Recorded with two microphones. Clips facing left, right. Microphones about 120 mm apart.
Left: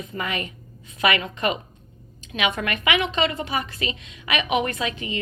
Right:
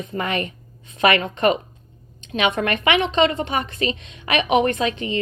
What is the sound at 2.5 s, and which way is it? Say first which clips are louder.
Speech: right 4 dB; 30° right (ahead or behind).